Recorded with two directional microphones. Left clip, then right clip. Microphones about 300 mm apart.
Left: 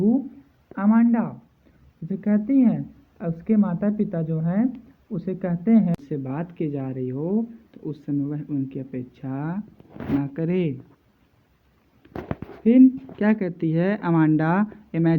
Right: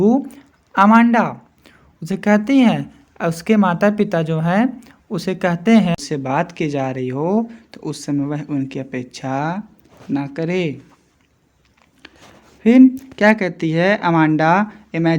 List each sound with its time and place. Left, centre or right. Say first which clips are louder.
0.8 s a woman's voice: right 10 dB; right; by 10.8 s centre
12.0 s a sound: left 6 dB; right
13.1 s speech: right 10 dB; centre